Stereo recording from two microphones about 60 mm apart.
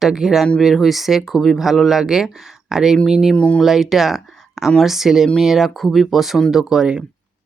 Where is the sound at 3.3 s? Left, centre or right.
Centre.